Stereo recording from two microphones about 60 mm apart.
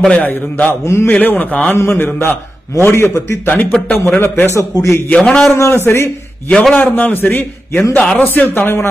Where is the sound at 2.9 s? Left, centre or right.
Left.